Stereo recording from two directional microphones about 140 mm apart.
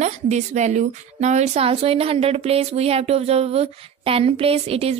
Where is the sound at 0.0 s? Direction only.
55° right (ahead or behind).